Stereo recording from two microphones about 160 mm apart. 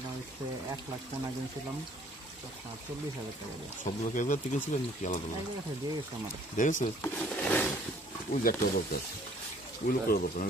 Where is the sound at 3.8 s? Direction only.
55° left (ahead or behind).